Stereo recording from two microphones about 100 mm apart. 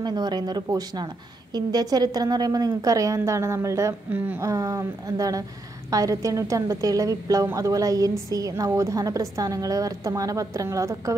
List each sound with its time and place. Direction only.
0.0 s a woman's voice: 45° right (ahead or behind)